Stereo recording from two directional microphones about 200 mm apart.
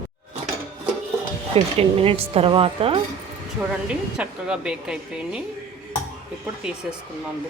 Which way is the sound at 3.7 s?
5° right (ahead or behind).